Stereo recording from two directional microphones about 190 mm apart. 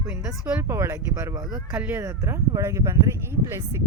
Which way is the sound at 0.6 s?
15° right (ahead or behind).